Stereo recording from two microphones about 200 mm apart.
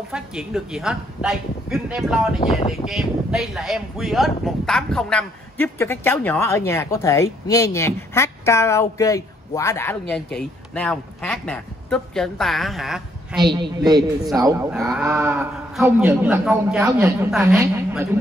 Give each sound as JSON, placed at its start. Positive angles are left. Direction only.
{"t": 0.1, "sound": "speech", "side_deg": -5}
{"t": 13.4, "sound": "a woman's voice", "side_deg": -20}
{"t": 14.7, "sound": "speech", "side_deg": -5}
{"t": 15.0, "sound": "a sound", "side_deg": -15}
{"t": 15.8, "sound": "a man's voice", "side_deg": -10}